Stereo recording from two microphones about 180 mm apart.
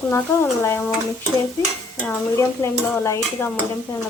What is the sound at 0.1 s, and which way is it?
Dishes, 15° left (ahead or behind).